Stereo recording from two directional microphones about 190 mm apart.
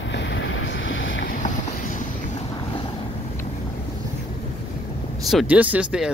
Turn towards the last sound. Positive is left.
turn(degrees=-5)  # may be behind; listen again after turning